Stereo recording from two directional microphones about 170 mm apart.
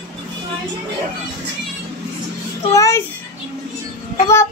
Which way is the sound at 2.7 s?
20° left (ahead or behind).